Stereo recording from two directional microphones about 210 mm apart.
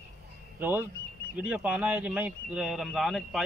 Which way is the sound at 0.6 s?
10° right (ahead or behind).